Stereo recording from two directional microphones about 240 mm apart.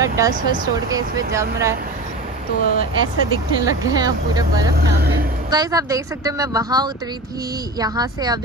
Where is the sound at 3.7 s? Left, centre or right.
Centre.